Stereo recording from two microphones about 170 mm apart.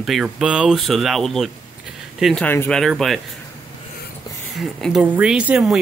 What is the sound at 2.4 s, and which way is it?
Speech, 10° left (ahead or behind).